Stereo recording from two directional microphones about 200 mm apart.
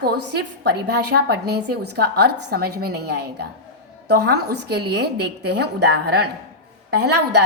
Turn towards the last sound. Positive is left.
turn(degrees=-55)  # may be behind; listen again after turning